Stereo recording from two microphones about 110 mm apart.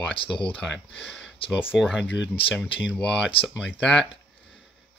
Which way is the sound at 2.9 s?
10° left (ahead or behind).